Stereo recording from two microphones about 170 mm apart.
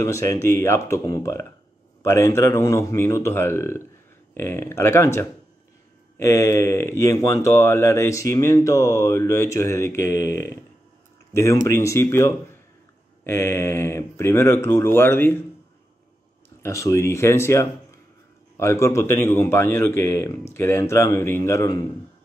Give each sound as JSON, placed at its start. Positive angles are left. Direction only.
{"t": 0.0, "sound": "speech", "side_deg": 15}
{"t": 11.6, "sound": "speech", "side_deg": 15}
{"t": 16.4, "sound": "speech", "side_deg": 15}